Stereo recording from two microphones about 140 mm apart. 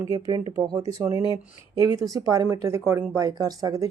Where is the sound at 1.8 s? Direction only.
25° right (ahead or behind).